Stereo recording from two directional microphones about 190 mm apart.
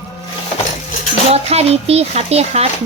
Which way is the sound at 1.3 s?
35° right (ahead or behind).